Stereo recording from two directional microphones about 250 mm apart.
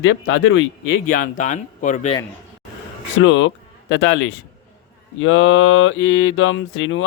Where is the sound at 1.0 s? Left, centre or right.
Left.